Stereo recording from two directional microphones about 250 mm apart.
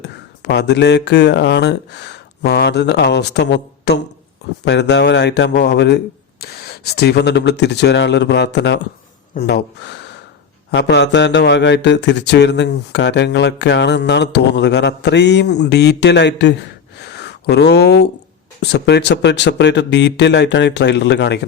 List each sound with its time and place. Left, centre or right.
0.0 s a man's voice: left
17.0 s a sound: left
18.6 s a man's voice: left